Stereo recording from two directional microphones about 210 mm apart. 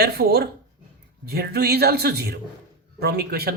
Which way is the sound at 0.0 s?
50° right (ahead or behind).